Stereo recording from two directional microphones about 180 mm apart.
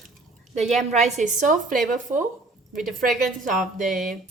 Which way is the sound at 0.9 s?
40° right (ahead or behind).